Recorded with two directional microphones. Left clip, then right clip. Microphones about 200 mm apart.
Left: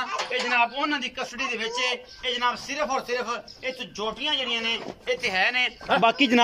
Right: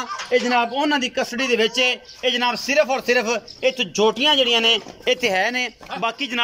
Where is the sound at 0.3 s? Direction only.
35° right (ahead or behind).